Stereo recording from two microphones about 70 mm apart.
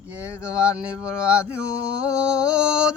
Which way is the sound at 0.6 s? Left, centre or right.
Centre.